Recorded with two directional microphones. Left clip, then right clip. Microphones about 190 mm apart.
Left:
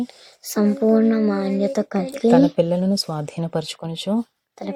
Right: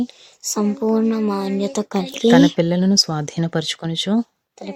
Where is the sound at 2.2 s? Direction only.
35° right (ahead or behind).